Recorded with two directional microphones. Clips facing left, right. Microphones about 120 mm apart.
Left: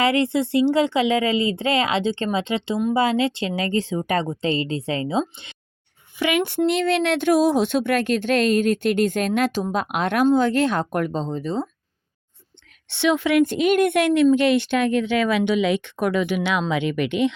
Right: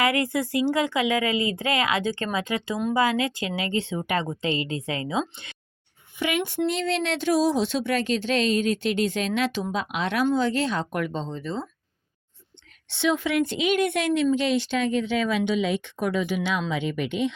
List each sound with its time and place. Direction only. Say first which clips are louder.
0.0 s a woman's voice: left 4 dB; 25° left (ahead or behind)
6.1 s a woman's voice: left 5 dB; 85° left
6.7 s speech: left 6 dB; 60° left (ahead or behind)
10.9 s a woman's voice: left 5 dB; 40° left (ahead or behind)
12.9 s a woman's voice: left 5 dB; 70° left (ahead or behind)